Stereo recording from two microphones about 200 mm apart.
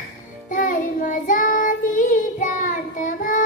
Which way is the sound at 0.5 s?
40° left (ahead or behind).